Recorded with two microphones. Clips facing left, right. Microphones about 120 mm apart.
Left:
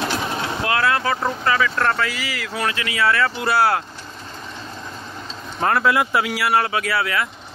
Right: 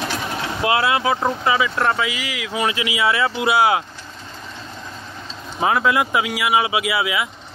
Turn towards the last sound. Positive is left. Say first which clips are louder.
# right 1 dB
turn(degrees=-10)  # may be behind; listen again after turning